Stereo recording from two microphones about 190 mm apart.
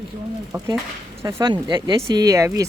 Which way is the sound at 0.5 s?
15° right (ahead or behind).